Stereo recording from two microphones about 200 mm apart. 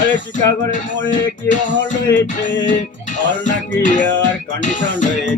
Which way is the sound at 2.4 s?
65° left (ahead or behind).